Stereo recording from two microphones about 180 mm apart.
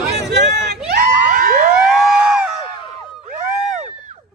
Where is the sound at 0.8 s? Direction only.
60° right (ahead or behind).